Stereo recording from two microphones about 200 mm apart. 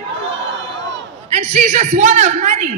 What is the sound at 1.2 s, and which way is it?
A man's voice, 35° right (ahead or behind).